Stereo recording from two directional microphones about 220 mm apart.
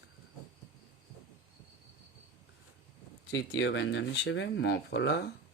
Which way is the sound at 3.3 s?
50° left (ahead or behind).